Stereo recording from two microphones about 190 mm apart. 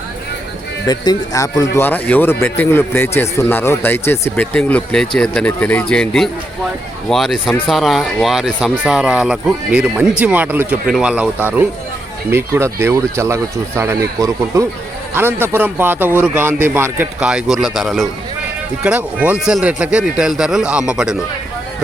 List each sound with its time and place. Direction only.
0.9 s a man's voice: 20° left (ahead or behind); by 21.2 s 5° right (ahead or behind)